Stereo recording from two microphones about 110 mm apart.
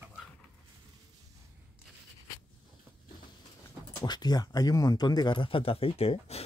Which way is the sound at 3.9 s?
40° left (ahead or behind).